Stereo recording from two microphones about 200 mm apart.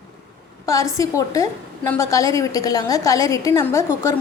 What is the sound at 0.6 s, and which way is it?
A woman's voice, 15° left (ahead or behind).